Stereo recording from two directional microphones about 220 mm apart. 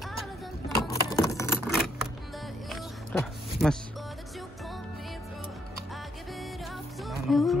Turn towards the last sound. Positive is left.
turn(degrees=0)  # may be behind; listen again after turning